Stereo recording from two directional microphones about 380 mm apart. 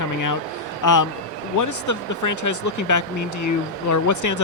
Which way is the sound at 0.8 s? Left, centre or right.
Left.